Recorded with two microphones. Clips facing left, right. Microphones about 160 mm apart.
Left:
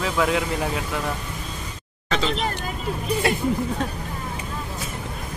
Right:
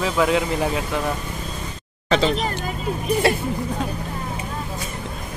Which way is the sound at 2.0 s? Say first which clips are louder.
Right 6 dB; 35° right (ahead or behind).